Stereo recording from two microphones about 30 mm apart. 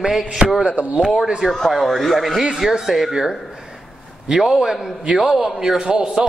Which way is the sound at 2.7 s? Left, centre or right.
Centre.